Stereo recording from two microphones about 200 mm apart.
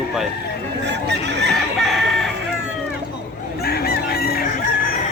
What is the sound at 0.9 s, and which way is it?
Speech, 60° right (ahead or behind).